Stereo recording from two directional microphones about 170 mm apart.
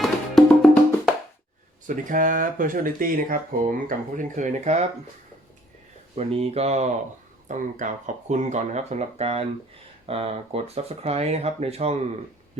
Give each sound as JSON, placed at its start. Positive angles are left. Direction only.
{"t": 0.0, "sound": "music", "side_deg": 0}
{"t": 1.9, "sound": "speech", "side_deg": -50}
{"t": 6.1, "sound": "speech", "side_deg": -35}